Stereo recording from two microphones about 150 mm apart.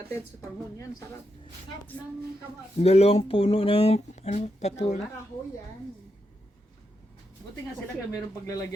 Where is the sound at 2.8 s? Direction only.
45° left (ahead or behind).